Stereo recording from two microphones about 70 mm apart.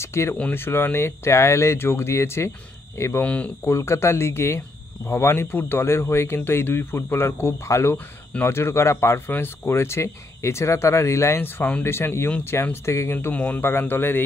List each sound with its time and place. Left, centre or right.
0.0 s speech: left
0.4 s speech: left
3.2 s speech: centre
3.6 s speech: left
13.3 s speech: left